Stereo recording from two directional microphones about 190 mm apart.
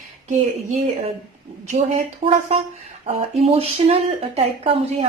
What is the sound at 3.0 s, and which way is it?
Speech, 30° right (ahead or behind).